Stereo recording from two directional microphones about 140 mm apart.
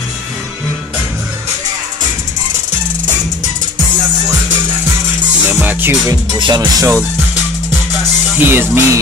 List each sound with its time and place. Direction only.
5.5 s music: 15° right (ahead or behind)
6.3 s music: 30° right (ahead or behind)
8.4 s speech: 15° right (ahead or behind)